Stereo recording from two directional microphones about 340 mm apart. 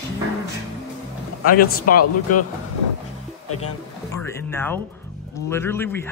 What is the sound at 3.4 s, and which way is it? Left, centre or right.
Speech, left.